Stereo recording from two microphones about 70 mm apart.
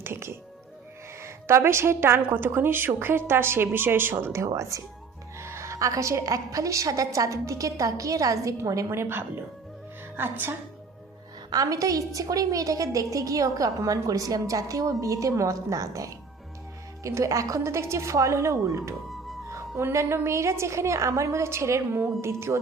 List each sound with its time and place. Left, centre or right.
0.0 s a woman's voice: right
8.9 s a woman's voice: right
11.5 s a woman's voice: right